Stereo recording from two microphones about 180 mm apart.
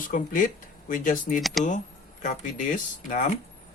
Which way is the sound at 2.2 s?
45° left (ahead or behind).